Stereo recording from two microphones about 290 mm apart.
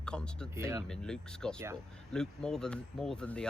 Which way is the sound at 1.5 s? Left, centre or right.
Centre.